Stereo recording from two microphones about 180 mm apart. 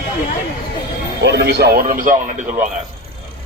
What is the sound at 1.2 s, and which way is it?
Speech, 65° right (ahead or behind).